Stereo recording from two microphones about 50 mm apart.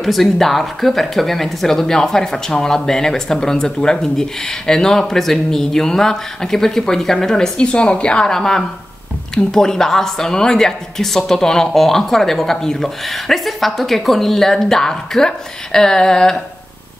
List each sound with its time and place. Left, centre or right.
0.0 s speech: centre
7.6 s speech: left